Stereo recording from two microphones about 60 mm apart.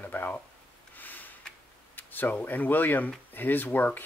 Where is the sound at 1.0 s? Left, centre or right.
Left.